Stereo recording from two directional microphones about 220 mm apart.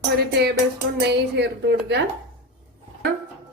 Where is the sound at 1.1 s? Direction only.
50° right (ahead or behind).